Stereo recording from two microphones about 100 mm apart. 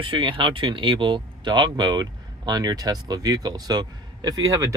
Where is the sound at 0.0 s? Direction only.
60° right (ahead or behind).